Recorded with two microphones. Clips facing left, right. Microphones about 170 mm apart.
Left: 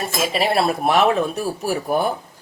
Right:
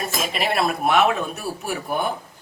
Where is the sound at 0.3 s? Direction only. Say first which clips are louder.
Left 3 dB; 35° left (ahead or behind).